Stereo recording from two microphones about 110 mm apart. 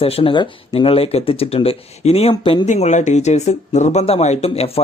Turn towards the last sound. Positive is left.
turn(degrees=65)  # may be behind; listen again after turning